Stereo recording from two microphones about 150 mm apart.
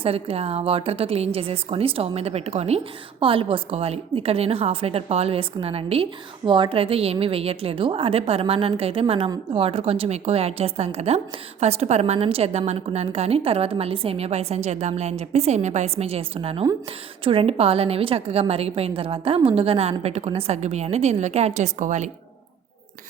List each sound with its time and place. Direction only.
0.0 s a woman's voice: 40° right (ahead or behind)